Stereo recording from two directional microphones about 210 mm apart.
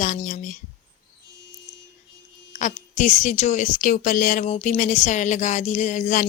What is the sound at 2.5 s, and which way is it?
A woman's voice, 35° left (ahead or behind).